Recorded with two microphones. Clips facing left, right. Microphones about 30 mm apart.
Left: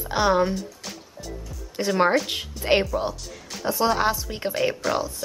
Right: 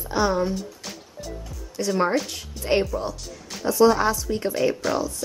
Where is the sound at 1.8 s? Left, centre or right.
Left.